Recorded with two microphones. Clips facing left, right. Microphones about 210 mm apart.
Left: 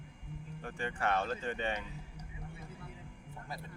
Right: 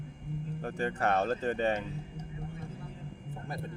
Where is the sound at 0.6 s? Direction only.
40° right (ahead or behind).